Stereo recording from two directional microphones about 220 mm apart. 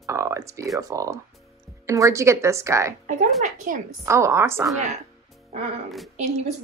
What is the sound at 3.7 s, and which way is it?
Speech, 35° right (ahead or behind).